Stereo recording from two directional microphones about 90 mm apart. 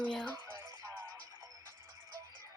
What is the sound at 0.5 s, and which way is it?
Music, 35° right (ahead or behind).